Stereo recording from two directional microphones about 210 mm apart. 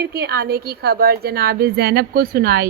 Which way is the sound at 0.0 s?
50° right (ahead or behind).